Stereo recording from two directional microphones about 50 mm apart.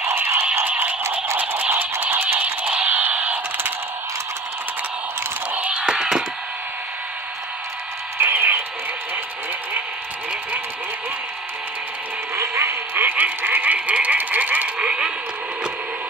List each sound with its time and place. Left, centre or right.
0.0 s a sound: right
0.7 s music: right
1.7 s music: right
2.4 s music: right
2.9 s a sound: right
5.5 s music: right
5.8 s music: centre
8.2 s a sound: right
12.4 s quack: right
12.9 s frog: right
14.9 s radio: centre